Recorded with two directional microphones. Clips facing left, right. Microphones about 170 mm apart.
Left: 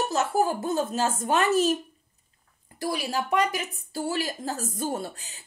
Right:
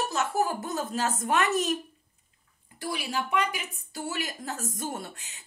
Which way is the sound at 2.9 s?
40° left (ahead or behind).